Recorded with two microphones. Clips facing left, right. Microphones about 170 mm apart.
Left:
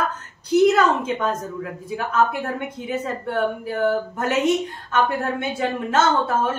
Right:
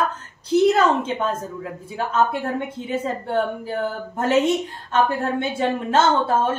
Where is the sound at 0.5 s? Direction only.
30° right (ahead or behind).